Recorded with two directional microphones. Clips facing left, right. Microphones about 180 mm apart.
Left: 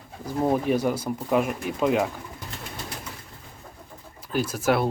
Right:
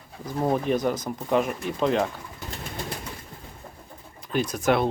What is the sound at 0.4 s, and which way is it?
Speech, 10° left (ahead or behind).